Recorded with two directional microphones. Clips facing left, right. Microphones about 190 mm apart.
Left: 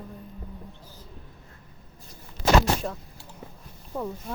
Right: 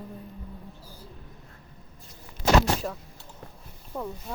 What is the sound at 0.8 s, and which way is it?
Speech, 10° right (ahead or behind).